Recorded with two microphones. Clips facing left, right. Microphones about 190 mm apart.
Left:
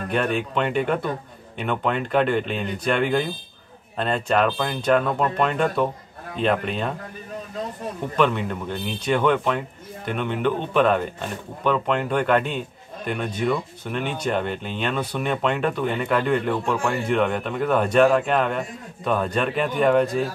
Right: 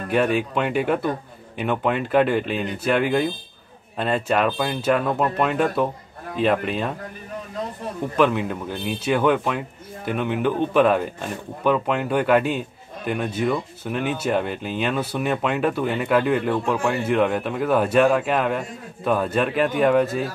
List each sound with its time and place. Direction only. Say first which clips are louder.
0.1 s speech: right 3 dB; 5° right (ahead or behind)
8.2 s speech: right 2 dB; 5° right (ahead or behind)